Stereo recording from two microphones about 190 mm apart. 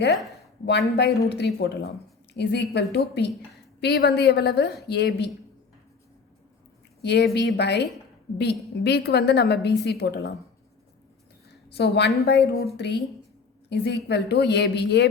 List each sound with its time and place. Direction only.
0.6 s a woman's voice: 60° left (ahead or behind)
7.0 s a woman's voice: 60° left (ahead or behind)
11.7 s a woman's voice: 60° left (ahead or behind)